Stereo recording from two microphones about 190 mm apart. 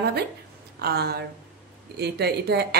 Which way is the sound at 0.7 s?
55° right (ahead or behind).